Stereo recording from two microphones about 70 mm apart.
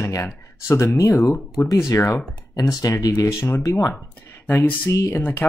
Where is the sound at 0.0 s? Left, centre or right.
Left.